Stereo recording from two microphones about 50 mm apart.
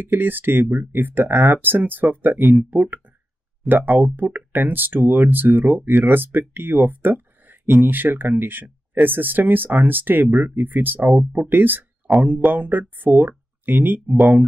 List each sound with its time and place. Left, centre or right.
0.0 s speech: right
12.1 s speech: centre
12.5 s speech: right